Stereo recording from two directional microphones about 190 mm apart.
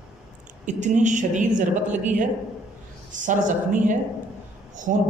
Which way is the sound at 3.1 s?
40° right (ahead or behind).